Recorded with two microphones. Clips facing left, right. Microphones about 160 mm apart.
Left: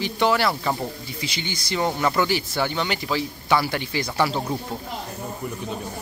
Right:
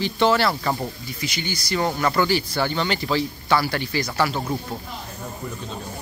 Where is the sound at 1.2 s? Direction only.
25° left (ahead or behind).